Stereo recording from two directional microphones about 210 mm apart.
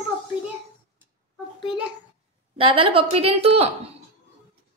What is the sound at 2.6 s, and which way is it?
A woman's voice, 25° right (ahead or behind).